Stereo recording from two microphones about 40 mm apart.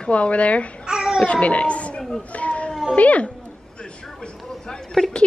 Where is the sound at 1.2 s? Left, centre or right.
Left.